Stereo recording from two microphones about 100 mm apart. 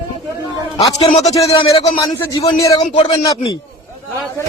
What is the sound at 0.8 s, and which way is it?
Speech, 80° left.